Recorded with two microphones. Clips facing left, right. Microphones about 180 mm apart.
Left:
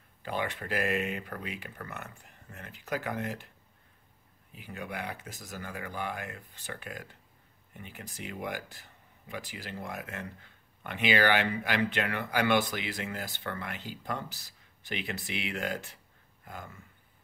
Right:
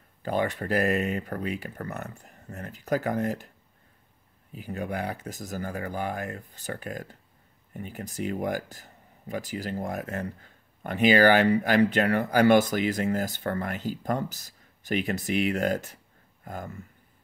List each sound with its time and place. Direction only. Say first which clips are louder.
0.2 s speech: right 7 dB; 40° right (ahead or behind)
4.5 s speech: right 8 dB; 40° right (ahead or behind)